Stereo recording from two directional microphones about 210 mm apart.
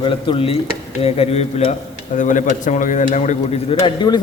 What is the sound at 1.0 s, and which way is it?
A man's voice, 30° left (ahead or behind).